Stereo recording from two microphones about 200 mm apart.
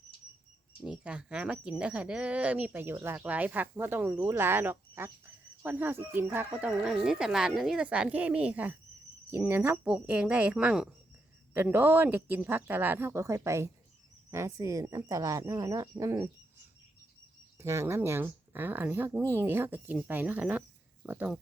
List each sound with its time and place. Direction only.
0.8 s speech: 5° right (ahead or behind)
17.6 s speech: 15° right (ahead or behind)